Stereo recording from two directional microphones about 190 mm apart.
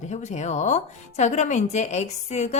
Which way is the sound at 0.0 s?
40° left (ahead or behind).